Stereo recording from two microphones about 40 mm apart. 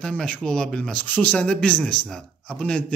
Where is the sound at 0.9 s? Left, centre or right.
Left.